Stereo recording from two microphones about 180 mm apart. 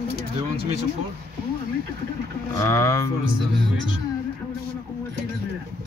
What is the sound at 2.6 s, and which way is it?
Speech, 15° left (ahead or behind).